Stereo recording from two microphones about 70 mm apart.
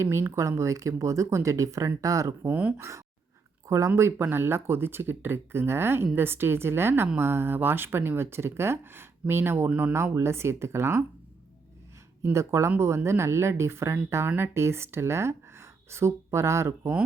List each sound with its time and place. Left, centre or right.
0.0 s speech: right
2.5 s speech: right
2.7 s speech: right
9.6 s speech: right
9.9 s speech: right
12.2 s speech: right